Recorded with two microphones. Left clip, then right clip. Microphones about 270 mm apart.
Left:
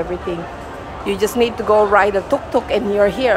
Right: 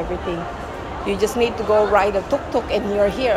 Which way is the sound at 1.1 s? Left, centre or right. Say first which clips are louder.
Left 3 dB; centre.